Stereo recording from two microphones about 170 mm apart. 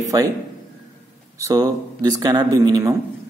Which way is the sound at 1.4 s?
20° right (ahead or behind).